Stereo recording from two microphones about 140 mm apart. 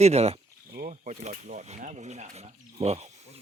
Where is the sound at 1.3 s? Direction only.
55° right (ahead or behind).